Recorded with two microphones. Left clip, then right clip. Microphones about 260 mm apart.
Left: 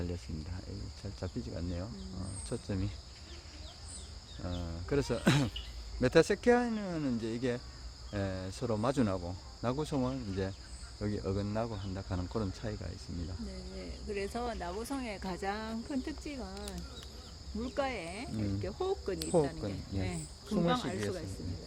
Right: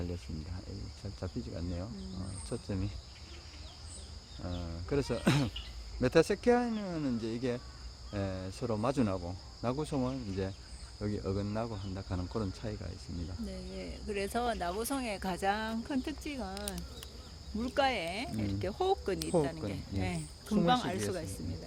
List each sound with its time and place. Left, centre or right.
1.2 s speech: centre
4.4 s speech: centre
13.7 s speech: right
19.2 s speech: centre
19.7 s speech: right